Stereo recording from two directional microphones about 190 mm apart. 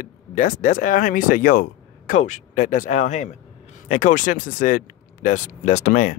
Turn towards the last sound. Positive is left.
turn(degrees=45)  # may be behind; listen again after turning